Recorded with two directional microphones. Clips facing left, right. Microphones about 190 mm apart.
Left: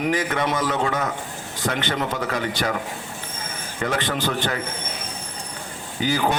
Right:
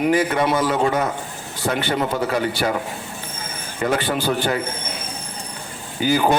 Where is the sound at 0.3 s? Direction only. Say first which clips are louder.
Right 4 dB; 35° right (ahead or behind).